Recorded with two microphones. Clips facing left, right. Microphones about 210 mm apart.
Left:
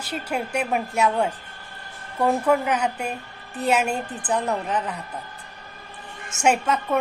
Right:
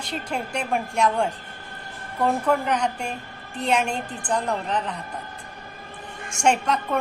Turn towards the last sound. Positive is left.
turn(degrees=5)  # may be behind; listen again after turning